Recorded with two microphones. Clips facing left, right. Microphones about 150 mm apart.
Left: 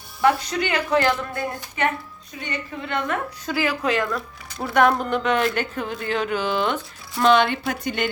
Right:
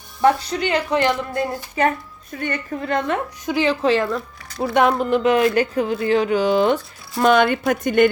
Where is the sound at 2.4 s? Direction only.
50° right (ahead or behind).